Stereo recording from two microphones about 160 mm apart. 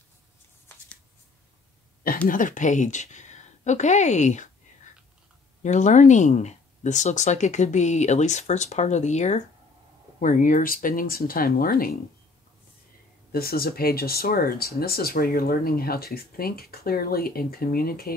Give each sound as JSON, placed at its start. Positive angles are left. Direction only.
{"t": 2.2, "sound": "a woman's voice", "side_deg": 55}
{"t": 13.3, "sound": "speech", "side_deg": 70}